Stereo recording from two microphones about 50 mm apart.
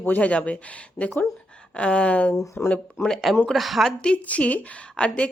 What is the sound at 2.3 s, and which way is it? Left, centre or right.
Speech, left.